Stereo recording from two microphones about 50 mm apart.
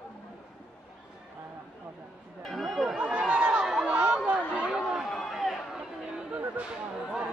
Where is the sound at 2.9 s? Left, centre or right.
Right.